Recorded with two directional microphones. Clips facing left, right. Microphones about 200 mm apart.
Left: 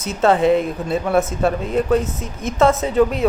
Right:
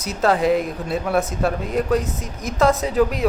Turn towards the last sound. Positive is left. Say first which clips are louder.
# left 3 dB
turn(degrees=0)  # may be behind; listen again after turning